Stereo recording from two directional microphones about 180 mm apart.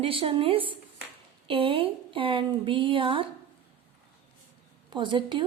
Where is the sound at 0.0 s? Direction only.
30° right (ahead or behind).